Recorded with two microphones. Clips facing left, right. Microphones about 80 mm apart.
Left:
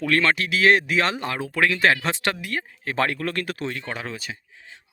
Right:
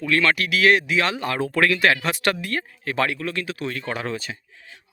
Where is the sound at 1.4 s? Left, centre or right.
Centre.